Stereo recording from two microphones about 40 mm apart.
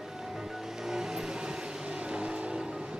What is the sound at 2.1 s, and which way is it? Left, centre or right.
Vehicle, right.